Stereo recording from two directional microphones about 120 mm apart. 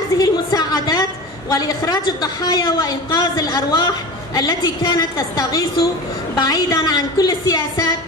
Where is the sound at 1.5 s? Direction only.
35° left (ahead or behind).